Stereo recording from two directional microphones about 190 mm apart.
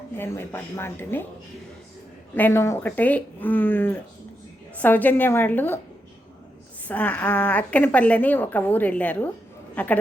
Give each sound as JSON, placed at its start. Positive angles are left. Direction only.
{"t": 0.2, "sound": "a woman's voice", "side_deg": 10}
{"t": 2.3, "sound": "a woman's voice", "side_deg": 10}
{"t": 6.8, "sound": "a woman's voice", "side_deg": 10}